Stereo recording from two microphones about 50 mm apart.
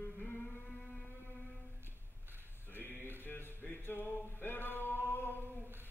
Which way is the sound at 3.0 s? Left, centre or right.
Right.